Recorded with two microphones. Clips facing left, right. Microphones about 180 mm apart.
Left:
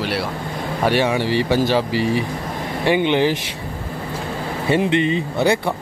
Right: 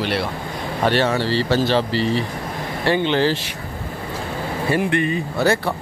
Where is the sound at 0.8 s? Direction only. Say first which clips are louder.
Left 1 dB; 15° left (ahead or behind).